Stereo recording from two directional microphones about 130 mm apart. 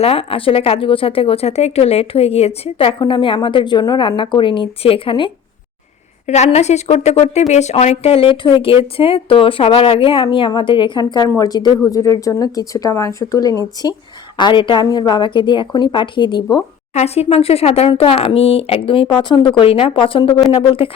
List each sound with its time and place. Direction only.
0.0 s a woman's voice: 50° left (ahead or behind)
6.2 s speech: 60° left (ahead or behind); by 16.6 s 35° left (ahead or behind)
16.9 s speech: 60° left (ahead or behind)
17.2 s a woman's voice: 50° left (ahead or behind)